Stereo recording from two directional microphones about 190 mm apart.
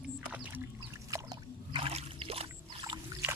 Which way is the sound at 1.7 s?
30° right (ahead or behind).